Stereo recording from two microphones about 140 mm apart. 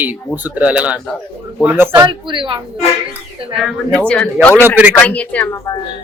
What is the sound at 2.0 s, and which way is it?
Speech, 35° right (ahead or behind).